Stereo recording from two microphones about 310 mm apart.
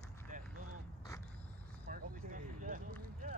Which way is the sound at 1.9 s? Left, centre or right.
Right.